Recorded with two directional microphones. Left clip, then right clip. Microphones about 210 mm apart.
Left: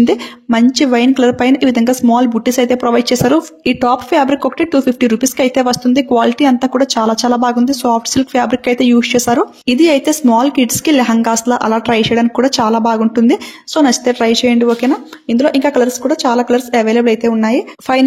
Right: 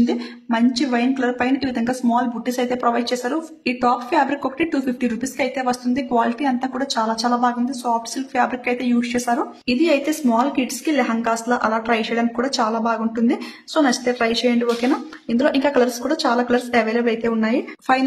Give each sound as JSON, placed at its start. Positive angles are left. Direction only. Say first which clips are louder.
{"t": 0.0, "sound": "speech", "louder": "left 9 dB", "side_deg": 40}